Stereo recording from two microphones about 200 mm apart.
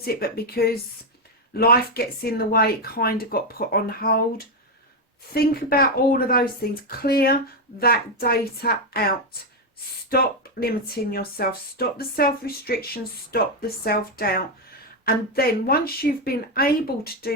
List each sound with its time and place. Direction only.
0.0 s speech: 50° left (ahead or behind)